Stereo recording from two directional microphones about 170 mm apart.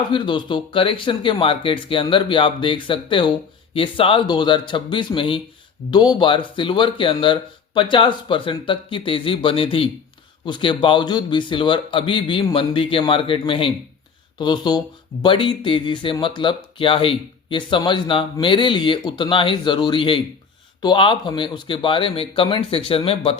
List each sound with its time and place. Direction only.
0.1 s speech: 30° left (ahead or behind)